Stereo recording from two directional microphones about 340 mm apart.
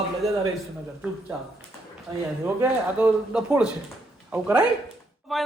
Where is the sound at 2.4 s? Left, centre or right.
Centre.